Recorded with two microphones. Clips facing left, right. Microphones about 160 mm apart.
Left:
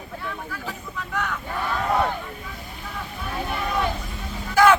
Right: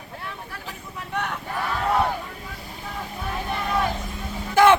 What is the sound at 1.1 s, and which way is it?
Vehicle, 30° right (ahead or behind).